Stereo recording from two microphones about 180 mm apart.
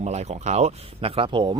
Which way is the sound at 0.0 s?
40° right (ahead or behind).